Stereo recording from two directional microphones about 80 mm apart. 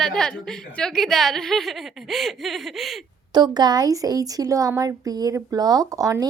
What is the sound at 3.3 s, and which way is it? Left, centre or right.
A woman's voice, right.